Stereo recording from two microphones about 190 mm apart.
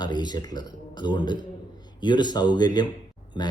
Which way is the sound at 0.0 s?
20° left (ahead or behind).